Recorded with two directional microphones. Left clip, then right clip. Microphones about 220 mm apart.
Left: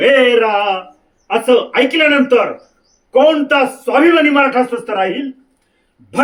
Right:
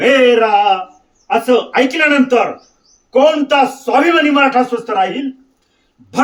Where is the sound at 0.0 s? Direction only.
20° right (ahead or behind).